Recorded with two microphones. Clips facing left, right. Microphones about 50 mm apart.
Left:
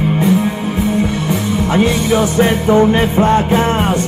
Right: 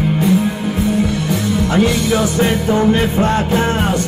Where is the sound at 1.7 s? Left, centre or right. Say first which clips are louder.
Left 2 dB; left.